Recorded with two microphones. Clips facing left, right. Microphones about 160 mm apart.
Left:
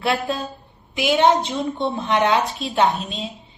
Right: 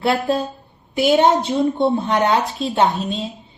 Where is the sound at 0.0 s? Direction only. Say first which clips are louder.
Right 4 dB; 30° right (ahead or behind).